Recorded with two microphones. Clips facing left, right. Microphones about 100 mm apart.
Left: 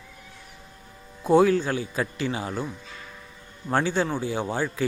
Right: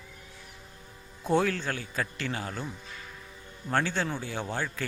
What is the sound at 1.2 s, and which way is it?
Speech, 10° left (ahead or behind).